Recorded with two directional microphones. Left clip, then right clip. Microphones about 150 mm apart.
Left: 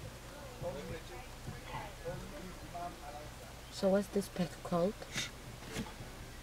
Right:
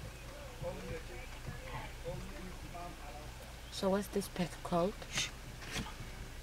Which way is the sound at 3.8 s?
20° right (ahead or behind).